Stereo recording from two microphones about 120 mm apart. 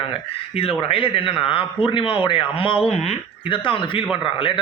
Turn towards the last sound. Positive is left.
turn(degrees=45)  # may be behind; listen again after turning